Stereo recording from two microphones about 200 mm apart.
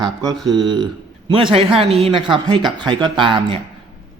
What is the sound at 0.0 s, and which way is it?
Speech, 20° right (ahead or behind).